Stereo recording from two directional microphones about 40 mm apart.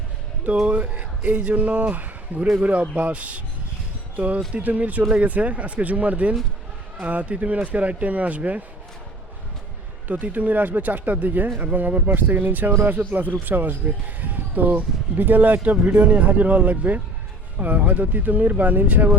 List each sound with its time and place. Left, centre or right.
0.7 s a sound: right
1.4 s speech: right
4.5 s speech: right
10.1 s speech: right